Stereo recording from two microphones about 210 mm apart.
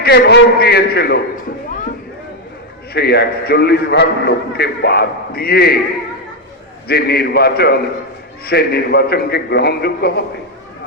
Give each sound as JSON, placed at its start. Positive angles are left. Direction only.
{"t": 0.0, "sound": "a man's voice", "side_deg": 50}
{"t": 2.9, "sound": "a man's voice", "side_deg": 50}
{"t": 6.8, "sound": "a man's voice", "side_deg": 50}